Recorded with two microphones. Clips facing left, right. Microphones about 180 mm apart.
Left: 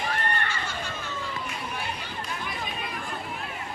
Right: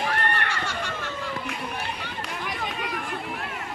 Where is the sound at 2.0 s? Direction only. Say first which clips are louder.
Right 2 dB; 70° right (ahead or behind).